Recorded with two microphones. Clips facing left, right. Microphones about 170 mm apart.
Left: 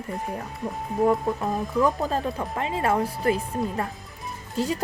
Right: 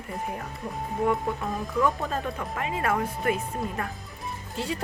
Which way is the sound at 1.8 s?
35° left (ahead or behind).